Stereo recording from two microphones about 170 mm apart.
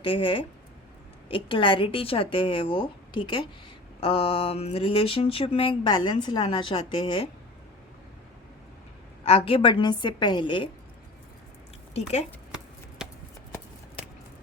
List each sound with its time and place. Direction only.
0.0 s mantra: 30° left (ahead or behind)
9.2 s a woman's voice: 35° left (ahead or behind)